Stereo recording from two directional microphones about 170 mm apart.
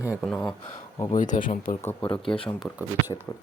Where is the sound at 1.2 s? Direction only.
50° left (ahead or behind).